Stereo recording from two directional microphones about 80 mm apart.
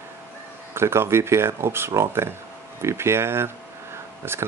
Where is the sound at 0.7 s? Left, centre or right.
Right.